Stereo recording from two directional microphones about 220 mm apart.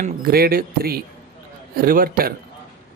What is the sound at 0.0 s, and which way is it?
Speech, 45° right (ahead or behind).